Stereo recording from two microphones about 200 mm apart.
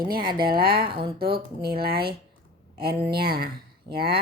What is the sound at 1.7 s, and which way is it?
Speech, 50° right (ahead or behind).